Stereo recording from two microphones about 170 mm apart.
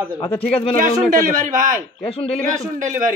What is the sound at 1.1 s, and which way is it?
Speech, 50° right (ahead or behind).